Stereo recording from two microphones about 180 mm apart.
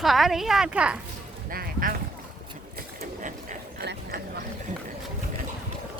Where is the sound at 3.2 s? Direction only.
45° right (ahead or behind).